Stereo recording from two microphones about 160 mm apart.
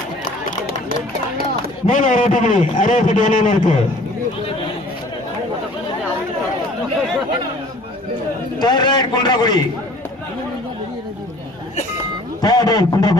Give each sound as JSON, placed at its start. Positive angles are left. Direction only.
{"t": 0.5, "sound": "run", "side_deg": 50}
{"t": 1.9, "sound": "a man's voice", "side_deg": 50}
{"t": 8.5, "sound": "a man's voice", "side_deg": 25}
{"t": 12.4, "sound": "a man's voice", "side_deg": 25}